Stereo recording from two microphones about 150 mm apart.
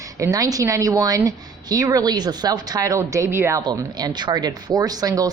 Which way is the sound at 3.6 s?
30° right (ahead or behind).